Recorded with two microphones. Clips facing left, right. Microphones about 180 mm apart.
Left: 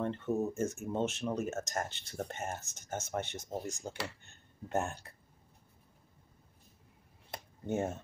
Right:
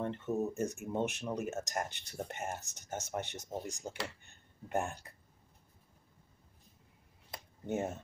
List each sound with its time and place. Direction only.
0.0 s speech: 15° right (ahead or behind)
7.6 s speech: 20° right (ahead or behind)